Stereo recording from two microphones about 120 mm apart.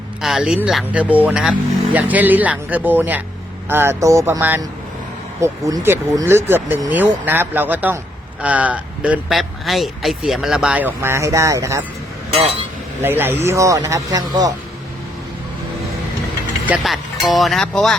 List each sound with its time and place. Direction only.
0.2 s speech: 5° right (ahead or behind)
9.3 s speech: centre (ahead or behind); by 11.8 s 25° right (ahead or behind)
12.3 s speech: 60° right (ahead or behind)
13.0 s speech: 20° right (ahead or behind)
16.6 s speech: 5° right (ahead or behind)